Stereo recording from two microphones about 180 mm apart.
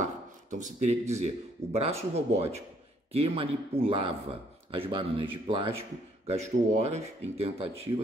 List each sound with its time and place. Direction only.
0.0 s speech: 45° right (ahead or behind)